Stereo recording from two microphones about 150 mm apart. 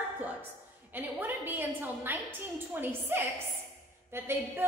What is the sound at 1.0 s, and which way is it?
A woman's voice, 10° right (ahead or behind).